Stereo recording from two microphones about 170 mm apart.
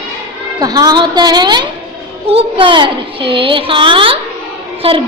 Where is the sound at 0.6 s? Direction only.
20° right (ahead or behind).